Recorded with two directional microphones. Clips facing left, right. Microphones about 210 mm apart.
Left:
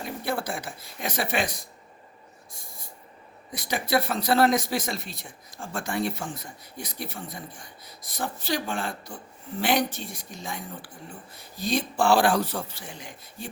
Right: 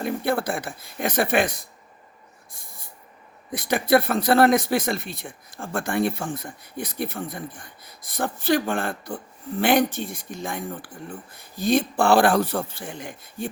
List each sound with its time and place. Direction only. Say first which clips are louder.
0.0 s speech: right 6 dB; 55° right (ahead or behind)
3.5 s speech: right 6 dB; 55° right (ahead or behind)